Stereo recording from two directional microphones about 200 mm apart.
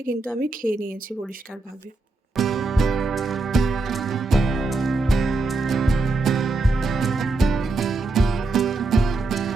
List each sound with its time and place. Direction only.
0.3 s a woman's voice: 45° right (ahead or behind)
2.3 s music: centre (ahead or behind)